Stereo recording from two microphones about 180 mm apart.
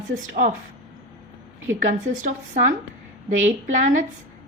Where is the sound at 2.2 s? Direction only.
45° right (ahead or behind).